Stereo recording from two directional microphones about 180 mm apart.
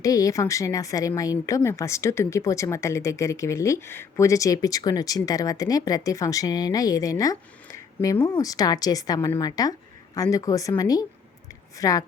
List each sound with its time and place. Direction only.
0.0 s speech: 20° left (ahead or behind)